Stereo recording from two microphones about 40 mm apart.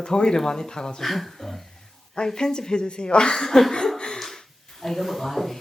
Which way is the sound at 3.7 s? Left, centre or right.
Centre.